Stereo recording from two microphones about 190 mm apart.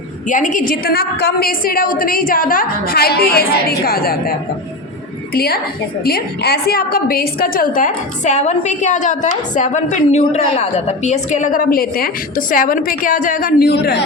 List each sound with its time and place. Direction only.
0.3 s a woman's voice: 40° left (ahead or behind); by 14.0 s 60° left (ahead or behind)